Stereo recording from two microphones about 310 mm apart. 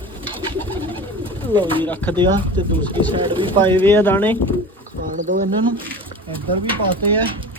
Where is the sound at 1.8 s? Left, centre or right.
Centre.